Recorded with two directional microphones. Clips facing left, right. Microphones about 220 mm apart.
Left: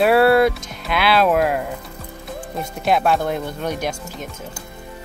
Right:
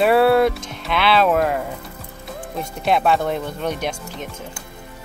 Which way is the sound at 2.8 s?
Centre (ahead or behind).